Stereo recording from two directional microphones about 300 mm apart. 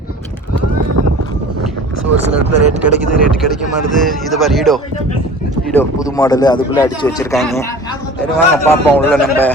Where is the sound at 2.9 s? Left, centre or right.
Left.